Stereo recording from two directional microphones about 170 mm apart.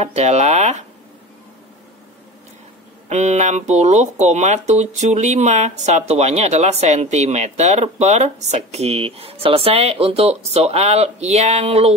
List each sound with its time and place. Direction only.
0.0 s speech: 40° right (ahead or behind)
3.1 s speech: 40° right (ahead or behind)